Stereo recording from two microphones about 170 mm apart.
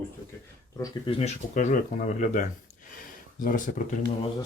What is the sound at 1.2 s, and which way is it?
Speech, 40° left (ahead or behind).